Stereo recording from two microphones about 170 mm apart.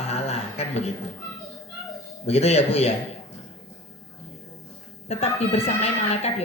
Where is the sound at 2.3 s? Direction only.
40° left (ahead or behind).